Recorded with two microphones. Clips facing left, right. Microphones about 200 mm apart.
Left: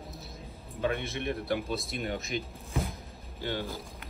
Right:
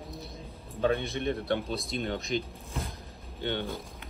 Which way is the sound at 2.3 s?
Centre (ahead or behind).